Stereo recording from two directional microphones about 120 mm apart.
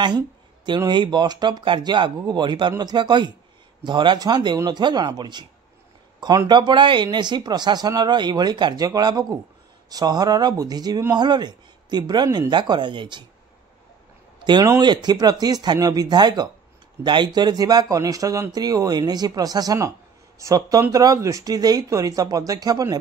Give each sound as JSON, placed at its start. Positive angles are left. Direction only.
{"t": 0.7, "sound": "speech", "side_deg": -40}
{"t": 14.4, "sound": "speech", "side_deg": -40}